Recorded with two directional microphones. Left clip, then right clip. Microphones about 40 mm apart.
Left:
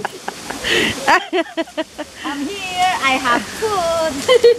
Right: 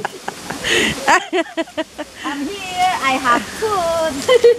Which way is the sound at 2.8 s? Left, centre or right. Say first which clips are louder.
Even; left.